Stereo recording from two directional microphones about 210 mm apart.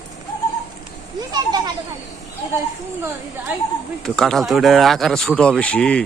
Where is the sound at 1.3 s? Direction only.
20° right (ahead or behind).